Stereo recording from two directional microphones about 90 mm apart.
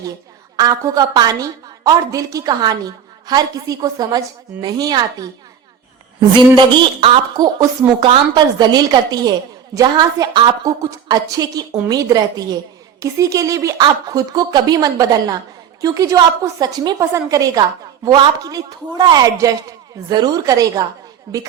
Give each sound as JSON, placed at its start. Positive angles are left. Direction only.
{"t": 0.5, "sound": "a woman's voice", "side_deg": -45}
{"t": 6.3, "sound": "a woman's voice", "side_deg": -60}
{"t": 10.6, "sound": "a woman's voice", "side_deg": -40}
{"t": 13.8, "sound": "a woman's voice", "side_deg": -50}